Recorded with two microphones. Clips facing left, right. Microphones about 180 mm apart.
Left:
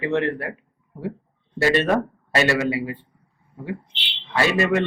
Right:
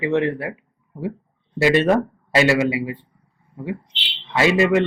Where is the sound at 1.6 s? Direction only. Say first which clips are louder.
Right 3 dB; 15° right (ahead or behind).